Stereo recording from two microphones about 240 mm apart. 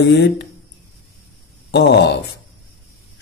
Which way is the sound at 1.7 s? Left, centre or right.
Left.